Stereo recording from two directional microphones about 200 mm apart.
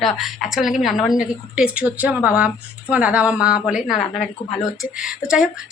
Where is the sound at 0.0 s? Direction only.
Centre (ahead or behind).